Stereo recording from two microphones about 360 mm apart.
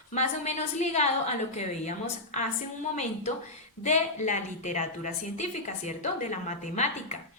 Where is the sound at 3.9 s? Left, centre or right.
Centre.